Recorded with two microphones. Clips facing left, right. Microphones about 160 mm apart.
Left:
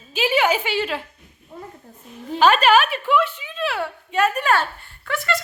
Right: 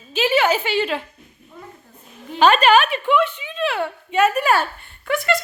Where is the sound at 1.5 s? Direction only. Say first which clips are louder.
Left 3 dB; 35° left (ahead or behind).